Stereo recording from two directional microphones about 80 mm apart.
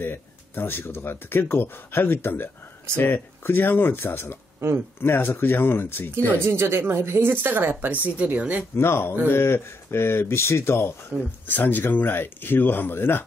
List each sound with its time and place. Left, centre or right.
0.0 s speech: left
4.6 s speech: right
5.0 s speech: left
6.3 s speech: right
8.7 s speech: left
11.4 s speech: left